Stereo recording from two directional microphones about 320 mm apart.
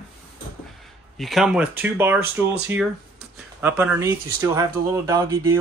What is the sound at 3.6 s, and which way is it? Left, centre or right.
Speech, centre.